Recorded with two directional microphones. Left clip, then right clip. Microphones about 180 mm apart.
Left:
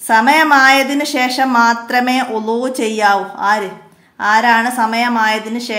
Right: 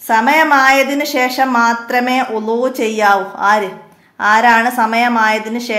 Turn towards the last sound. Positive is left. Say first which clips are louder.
# right 1 dB
turn(degrees=0)  # may be behind; listen again after turning